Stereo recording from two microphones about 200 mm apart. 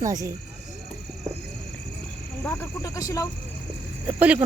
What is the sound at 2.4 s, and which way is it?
Speech, 15° left (ahead or behind).